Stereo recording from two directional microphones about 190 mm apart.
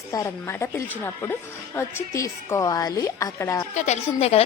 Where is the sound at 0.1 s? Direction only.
15° left (ahead or behind).